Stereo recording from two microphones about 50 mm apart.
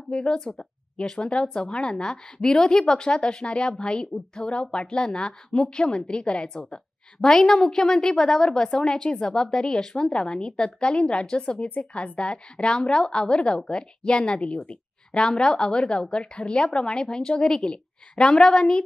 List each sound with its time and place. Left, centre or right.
0.1 s a woman's voice: centre